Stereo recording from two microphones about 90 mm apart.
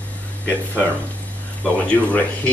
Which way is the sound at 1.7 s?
15° left (ahead or behind).